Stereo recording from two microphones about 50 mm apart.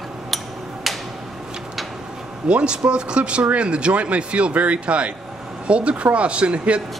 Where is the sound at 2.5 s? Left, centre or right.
Centre.